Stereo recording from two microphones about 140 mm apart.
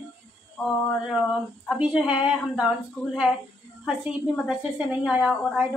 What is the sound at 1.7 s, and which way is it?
Speech, 5° right (ahead or behind).